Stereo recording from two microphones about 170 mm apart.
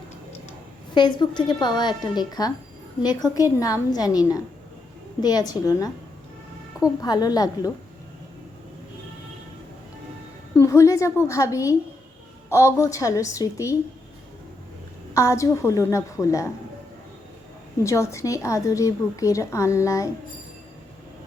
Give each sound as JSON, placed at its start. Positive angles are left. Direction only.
{"t": 0.9, "sound": "a woman's voice", "side_deg": 25}
{"t": 7.0, "sound": "a woman's voice", "side_deg": 25}
{"t": 10.5, "sound": "a woman's voice", "side_deg": 15}
{"t": 15.1, "sound": "a woman's voice", "side_deg": 20}
{"t": 17.8, "sound": "a woman's voice", "side_deg": 15}